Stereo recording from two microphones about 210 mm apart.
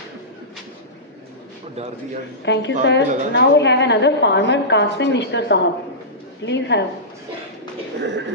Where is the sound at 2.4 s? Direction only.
55° left (ahead or behind).